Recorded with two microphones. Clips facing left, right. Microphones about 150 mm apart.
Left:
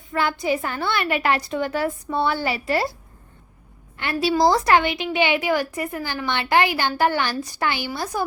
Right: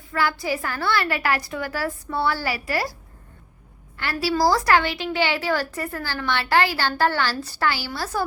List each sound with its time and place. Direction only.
0.1 s a woman's voice: 20° left (ahead or behind)
3.9 s a woman's voice: 20° left (ahead or behind)